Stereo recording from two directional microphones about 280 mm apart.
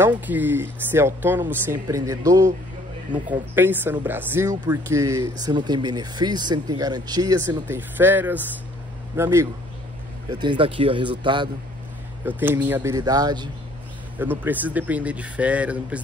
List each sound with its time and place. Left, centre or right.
0.0 s speech: centre